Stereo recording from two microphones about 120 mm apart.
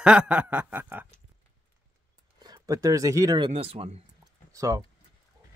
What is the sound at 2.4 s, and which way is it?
Speech, 30° right (ahead or behind).